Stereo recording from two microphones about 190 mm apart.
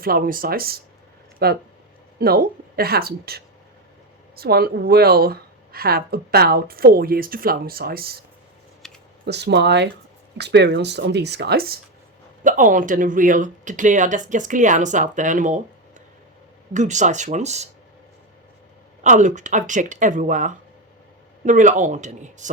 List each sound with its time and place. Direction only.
0.0 s speech: 50° right (ahead or behind)
8.8 s typing: centre (ahead or behind)
9.2 s speech: 60° right (ahead or behind)
12.4 s speech: 45° right (ahead or behind)
19.0 s speech: 40° right (ahead or behind)